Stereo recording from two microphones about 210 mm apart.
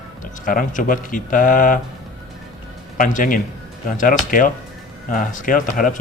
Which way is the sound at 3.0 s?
40° left (ahead or behind).